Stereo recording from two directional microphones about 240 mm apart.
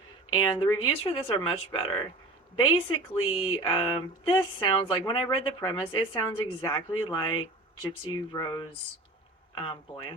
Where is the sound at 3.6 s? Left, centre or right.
Left.